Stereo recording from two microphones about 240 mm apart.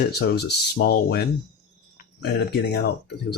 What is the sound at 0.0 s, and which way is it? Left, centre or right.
Speech, left.